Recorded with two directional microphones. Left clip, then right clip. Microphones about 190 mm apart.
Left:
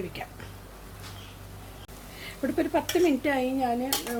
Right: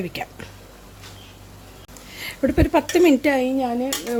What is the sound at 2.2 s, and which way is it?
A woman's voice, 40° right (ahead or behind).